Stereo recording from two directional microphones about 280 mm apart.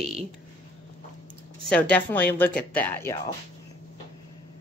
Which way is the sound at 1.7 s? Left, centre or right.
Centre.